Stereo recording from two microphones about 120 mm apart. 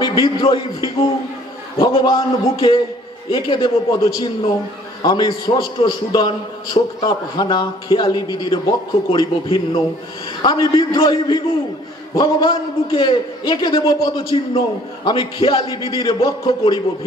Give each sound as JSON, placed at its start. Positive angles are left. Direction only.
{"t": 0.0, "sound": "a man's voice", "side_deg": 45}
{"t": 16.2, "sound": "a man's voice", "side_deg": 30}